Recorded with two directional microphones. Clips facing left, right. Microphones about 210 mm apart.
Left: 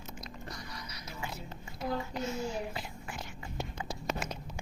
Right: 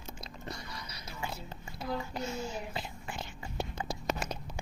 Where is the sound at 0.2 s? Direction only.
30° right (ahead or behind).